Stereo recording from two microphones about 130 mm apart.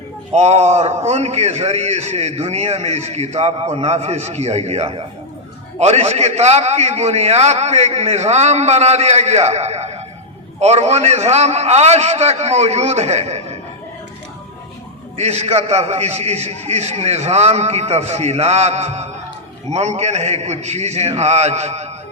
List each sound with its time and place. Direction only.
0.3 s a man's voice: 55° right (ahead or behind)
15.2 s a man's voice: 55° right (ahead or behind)